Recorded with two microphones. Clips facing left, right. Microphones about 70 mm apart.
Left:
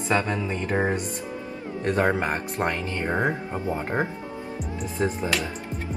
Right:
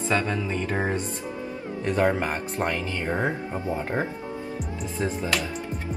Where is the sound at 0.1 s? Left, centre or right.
Centre.